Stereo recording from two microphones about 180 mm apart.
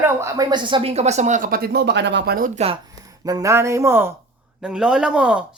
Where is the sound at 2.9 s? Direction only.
20° right (ahead or behind).